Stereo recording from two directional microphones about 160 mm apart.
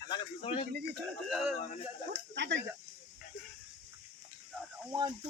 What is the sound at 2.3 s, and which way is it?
Snake, 90° right.